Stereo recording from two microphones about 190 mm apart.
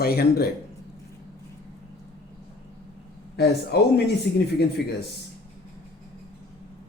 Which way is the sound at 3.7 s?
60° left (ahead or behind).